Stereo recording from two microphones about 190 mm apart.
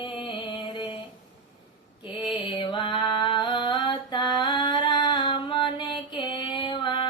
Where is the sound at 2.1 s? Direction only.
25° left (ahead or behind).